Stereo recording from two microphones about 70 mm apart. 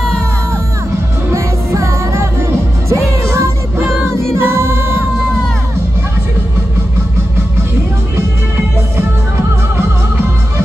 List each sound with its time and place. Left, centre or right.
1.3 s music: right